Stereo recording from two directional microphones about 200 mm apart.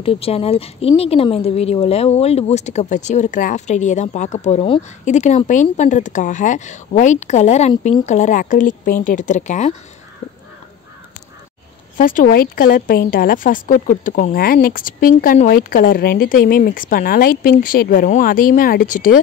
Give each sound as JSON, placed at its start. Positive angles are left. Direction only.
{"t": 0.0, "sound": "speech", "side_deg": 30}
{"t": 12.0, "sound": "a woman's voice", "side_deg": 45}